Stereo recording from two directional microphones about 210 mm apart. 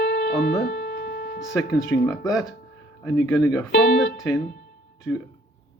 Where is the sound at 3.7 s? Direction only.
55° left (ahead or behind).